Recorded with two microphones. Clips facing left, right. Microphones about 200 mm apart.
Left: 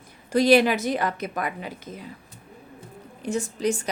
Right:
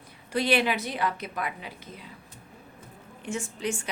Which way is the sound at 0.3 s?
40° left (ahead or behind).